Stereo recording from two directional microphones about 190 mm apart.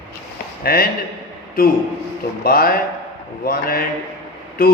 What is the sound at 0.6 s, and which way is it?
A man's voice, 50° left (ahead or behind).